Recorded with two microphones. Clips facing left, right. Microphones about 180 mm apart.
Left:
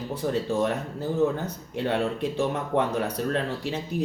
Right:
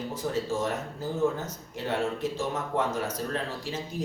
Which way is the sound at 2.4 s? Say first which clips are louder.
Left 6 dB; 65° left (ahead or behind).